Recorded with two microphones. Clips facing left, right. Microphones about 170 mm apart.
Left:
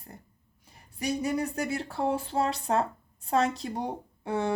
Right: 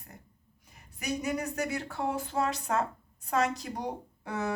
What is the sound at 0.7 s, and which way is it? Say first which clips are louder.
Speech: left 3 dB; 30° left (ahead or behind).